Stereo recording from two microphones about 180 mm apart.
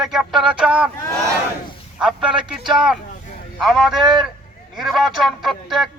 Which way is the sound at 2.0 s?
5° right (ahead or behind).